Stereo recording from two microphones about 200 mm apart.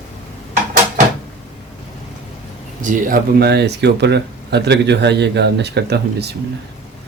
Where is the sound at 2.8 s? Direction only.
40° right (ahead or behind).